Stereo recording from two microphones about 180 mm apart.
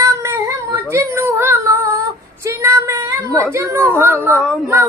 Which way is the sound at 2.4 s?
15° right (ahead or behind).